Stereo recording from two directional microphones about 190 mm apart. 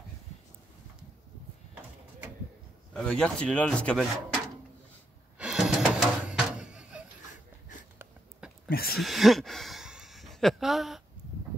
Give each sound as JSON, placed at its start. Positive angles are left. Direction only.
{"t": 2.9, "sound": "speech", "side_deg": 5}
{"t": 5.4, "sound": "music", "side_deg": 0}
{"t": 8.6, "sound": "speech", "side_deg": 55}
{"t": 8.9, "sound": "speech", "side_deg": 0}